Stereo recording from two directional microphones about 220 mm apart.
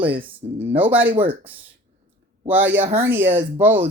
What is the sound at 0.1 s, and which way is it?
Speech, 25° right (ahead or behind).